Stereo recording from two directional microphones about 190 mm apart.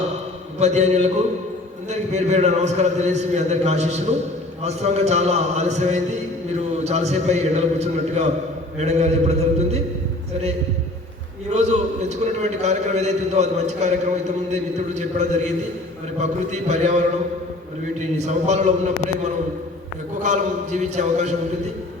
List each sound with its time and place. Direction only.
0.6 s a man's voice: 35° right (ahead or behind)
11.5 s a man's voice: 35° right (ahead or behind)
18.2 s a man's voice: 35° right (ahead or behind)
20.2 s a man's voice: 40° right (ahead or behind)